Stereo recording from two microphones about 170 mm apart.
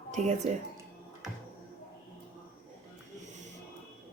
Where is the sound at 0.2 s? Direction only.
45° right (ahead or behind).